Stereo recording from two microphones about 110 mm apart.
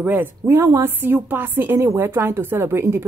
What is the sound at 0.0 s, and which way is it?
A woman's voice, 20° right (ahead or behind).